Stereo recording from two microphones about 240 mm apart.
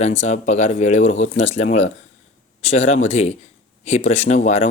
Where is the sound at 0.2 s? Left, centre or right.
Left.